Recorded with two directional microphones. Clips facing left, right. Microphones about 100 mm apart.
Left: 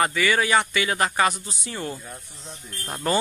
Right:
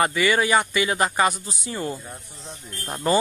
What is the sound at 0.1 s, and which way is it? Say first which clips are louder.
Speech: right 1 dB; 15° right (ahead or behind).